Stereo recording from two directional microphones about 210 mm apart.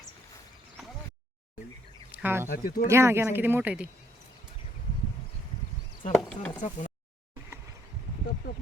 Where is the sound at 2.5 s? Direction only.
45° left (ahead or behind).